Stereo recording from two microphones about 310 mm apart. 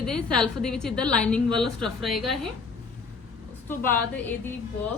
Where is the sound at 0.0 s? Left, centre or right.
Centre.